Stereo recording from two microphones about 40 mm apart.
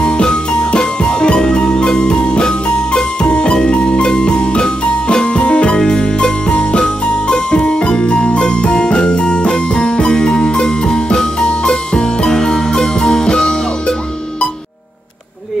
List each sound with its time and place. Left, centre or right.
0.0 s music: left